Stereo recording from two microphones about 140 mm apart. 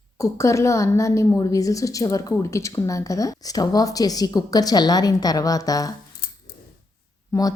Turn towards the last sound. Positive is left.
turn(degrees=25)  # may be behind; listen again after turning